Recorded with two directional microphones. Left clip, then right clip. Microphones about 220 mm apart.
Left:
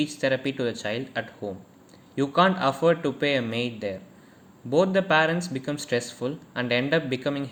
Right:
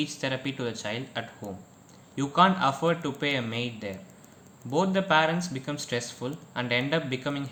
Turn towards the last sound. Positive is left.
turn(degrees=10)  # may be behind; listen again after turning